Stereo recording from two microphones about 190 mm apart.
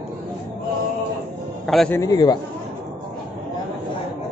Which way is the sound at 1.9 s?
20° left (ahead or behind).